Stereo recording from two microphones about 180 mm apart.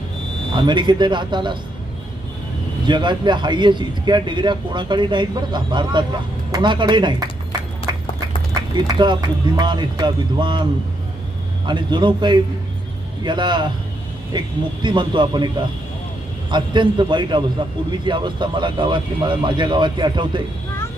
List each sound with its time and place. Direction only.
0.5 s a man's voice: 25° right (ahead or behind)
2.8 s a man's voice: 25° right (ahead or behind)
7.9 s a sound: 20° right (ahead or behind)
8.5 s a man's voice: 25° right (ahead or behind)
16.5 s a man's voice: 25° right (ahead or behind)